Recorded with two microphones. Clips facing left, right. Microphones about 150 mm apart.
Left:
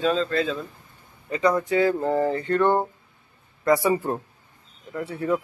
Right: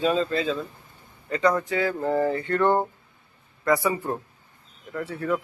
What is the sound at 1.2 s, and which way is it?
Speech, 15° left (ahead or behind).